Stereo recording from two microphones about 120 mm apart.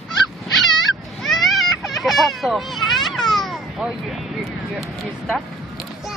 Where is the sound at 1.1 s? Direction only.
Centre (ahead or behind).